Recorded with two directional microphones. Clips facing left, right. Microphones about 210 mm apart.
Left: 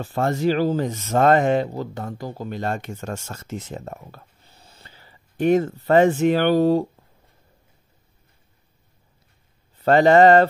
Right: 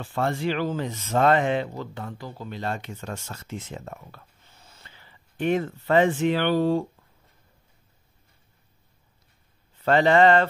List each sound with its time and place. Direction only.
0.0 s speech: 40° left (ahead or behind)
9.8 s speech: 40° left (ahead or behind)